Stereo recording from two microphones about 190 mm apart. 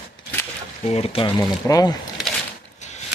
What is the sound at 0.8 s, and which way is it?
Speech, 30° left (ahead or behind).